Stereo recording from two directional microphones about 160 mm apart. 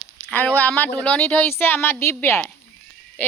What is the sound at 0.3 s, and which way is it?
Speech, 10° left (ahead or behind).